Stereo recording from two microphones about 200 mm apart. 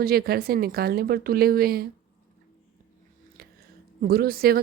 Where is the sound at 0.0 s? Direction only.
50° right (ahead or behind).